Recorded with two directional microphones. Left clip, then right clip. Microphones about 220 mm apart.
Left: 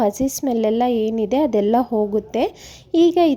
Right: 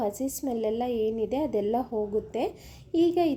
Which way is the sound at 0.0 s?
40° left (ahead or behind).